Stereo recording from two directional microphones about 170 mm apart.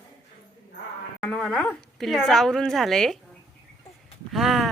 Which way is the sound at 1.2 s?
5° left (ahead or behind).